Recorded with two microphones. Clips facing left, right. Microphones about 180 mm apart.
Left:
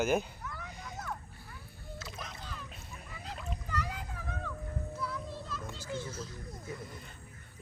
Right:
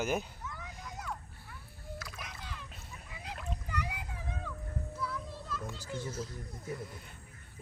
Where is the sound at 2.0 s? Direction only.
20° left (ahead or behind).